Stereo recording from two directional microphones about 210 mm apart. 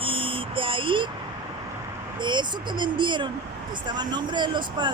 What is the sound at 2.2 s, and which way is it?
Speech, 20° right (ahead or behind).